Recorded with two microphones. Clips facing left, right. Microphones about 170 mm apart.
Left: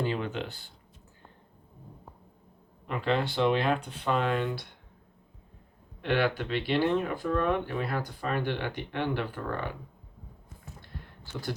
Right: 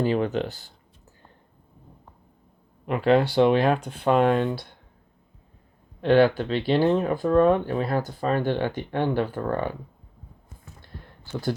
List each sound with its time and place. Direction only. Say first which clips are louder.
0.0 s speech: right 8 dB; 40° right (ahead or behind)
2.8 s speech: right 9 dB; 50° right (ahead or behind)
6.0 s speech: right 9 dB; 35° right (ahead or behind)